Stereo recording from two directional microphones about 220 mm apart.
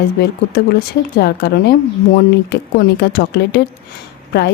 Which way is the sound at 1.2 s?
45° left (ahead or behind).